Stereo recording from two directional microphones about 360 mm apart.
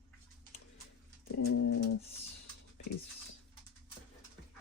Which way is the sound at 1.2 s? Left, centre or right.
Left.